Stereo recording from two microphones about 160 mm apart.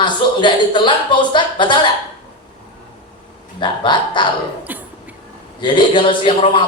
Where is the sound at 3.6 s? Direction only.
30° left (ahead or behind).